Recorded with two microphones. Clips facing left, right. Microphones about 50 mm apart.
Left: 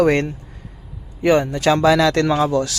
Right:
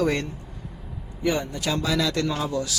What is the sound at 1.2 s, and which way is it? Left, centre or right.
Speech, left.